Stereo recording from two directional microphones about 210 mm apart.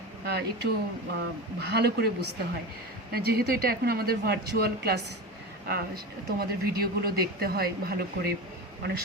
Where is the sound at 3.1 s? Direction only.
50° right (ahead or behind).